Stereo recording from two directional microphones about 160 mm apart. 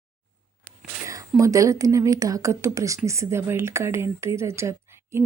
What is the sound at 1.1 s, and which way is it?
A woman's voice, 20° right (ahead or behind).